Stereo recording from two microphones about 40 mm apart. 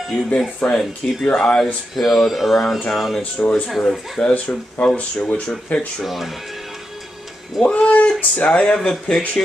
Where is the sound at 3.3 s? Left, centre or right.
Left.